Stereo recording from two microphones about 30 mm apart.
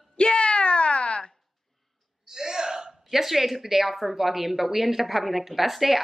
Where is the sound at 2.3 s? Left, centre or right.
Right.